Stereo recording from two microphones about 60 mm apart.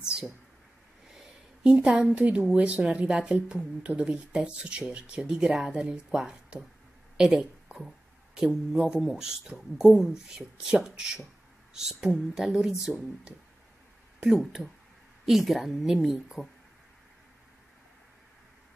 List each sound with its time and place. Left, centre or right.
1.1 s a sound: centre
2.5 s a woman's voice: right
15.2 s a woman's voice: centre